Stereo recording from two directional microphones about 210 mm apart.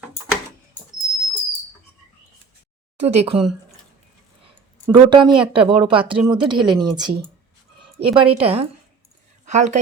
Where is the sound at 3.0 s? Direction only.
30° right (ahead or behind).